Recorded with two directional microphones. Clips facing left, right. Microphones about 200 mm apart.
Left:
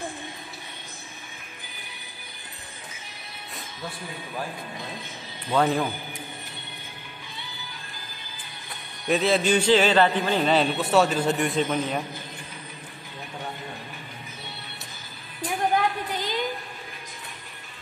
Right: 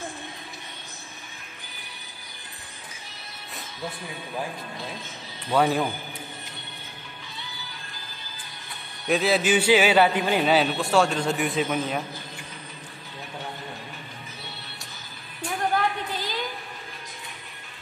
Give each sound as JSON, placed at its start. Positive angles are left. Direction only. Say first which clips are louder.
{"t": 5.5, "sound": "speech", "louder": "right 1 dB", "side_deg": -10}
{"t": 9.0, "sound": "a man's voice", "louder": "even", "side_deg": 0}
{"t": 16.1, "sound": "a sound", "louder": "left 2 dB", "side_deg": 15}